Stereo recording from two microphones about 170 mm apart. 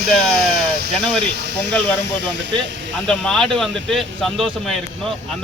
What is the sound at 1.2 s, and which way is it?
Speech, 85° right.